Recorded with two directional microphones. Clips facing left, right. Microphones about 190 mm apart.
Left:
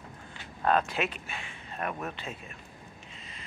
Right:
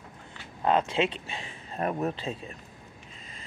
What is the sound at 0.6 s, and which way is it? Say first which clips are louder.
Speech: right 2 dB; 25° right (ahead or behind).